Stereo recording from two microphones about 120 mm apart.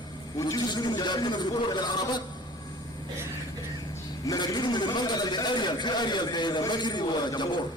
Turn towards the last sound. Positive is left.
turn(degrees=40)  # may be behind; listen again after turning